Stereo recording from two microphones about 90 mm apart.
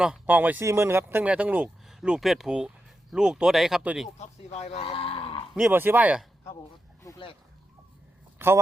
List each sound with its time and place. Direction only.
0.3 s speech: 20° right (ahead or behind)
0.6 s speech: 30° right (ahead or behind)
1.2 s speech: 15° right (ahead or behind)
4.8 s livestock: 90° left
5.7 s speech: 25° right (ahead or behind)
7.1 s a sound: 35° left (ahead or behind)
8.4 s a man's voice: 25° right (ahead or behind)